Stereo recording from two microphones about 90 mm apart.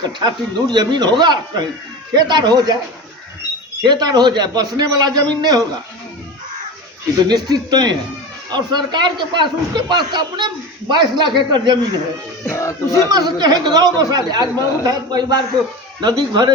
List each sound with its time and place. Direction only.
0.0 s a man's voice: 50° right (ahead or behind)
3.8 s a man's voice: 50° right (ahead or behind)
7.2 s a man's voice: 50° right (ahead or behind)
12.5 s speech: 35° left (ahead or behind)
13.1 s a man's voice: 50° right (ahead or behind)